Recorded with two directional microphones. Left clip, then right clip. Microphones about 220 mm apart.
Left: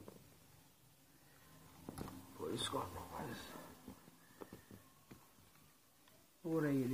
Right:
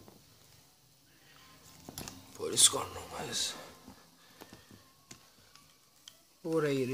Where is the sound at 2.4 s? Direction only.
40° right (ahead or behind).